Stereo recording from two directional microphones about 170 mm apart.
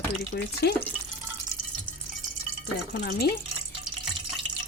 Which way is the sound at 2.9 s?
65° left (ahead or behind).